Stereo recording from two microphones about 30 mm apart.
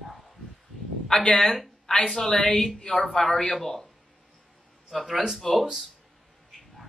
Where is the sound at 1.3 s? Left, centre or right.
Centre.